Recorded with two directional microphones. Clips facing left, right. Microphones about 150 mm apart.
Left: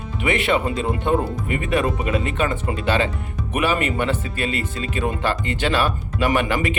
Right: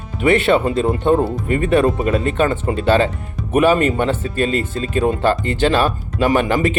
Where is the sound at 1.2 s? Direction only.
30° right (ahead or behind).